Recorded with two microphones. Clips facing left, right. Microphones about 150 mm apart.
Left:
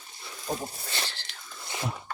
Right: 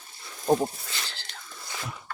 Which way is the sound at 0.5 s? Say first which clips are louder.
Right 11 dB; 55° right (ahead or behind).